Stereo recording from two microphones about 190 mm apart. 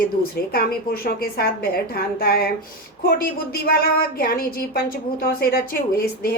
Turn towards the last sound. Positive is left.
turn(degrees=50)  # may be behind; listen again after turning